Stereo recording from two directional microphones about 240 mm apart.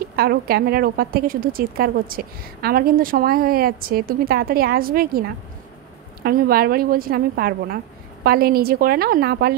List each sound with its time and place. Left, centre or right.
0.1 s speech: right
6.2 s speech: right